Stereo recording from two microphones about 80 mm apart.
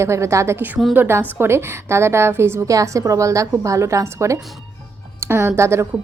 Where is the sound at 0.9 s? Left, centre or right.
Right.